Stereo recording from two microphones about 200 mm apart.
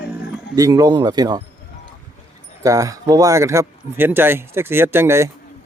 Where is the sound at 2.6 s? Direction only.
15° right (ahead or behind).